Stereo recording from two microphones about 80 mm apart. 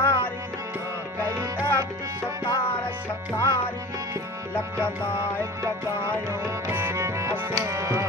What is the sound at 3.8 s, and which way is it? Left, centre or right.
Music, right.